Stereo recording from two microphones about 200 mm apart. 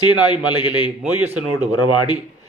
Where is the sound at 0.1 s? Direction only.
20° left (ahead or behind).